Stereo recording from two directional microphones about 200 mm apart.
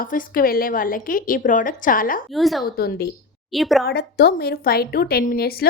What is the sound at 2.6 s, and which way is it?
Speech, 50° left (ahead or behind).